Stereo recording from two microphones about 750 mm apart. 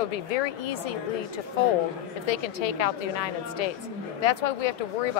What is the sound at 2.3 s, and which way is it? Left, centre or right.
A woman's voice, left.